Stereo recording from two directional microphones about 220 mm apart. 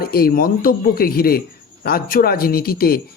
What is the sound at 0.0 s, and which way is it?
Speech, 45° left (ahead or behind).